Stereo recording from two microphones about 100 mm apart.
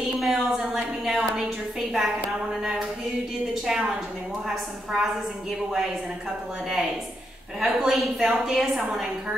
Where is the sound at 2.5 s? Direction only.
5° right (ahead or behind).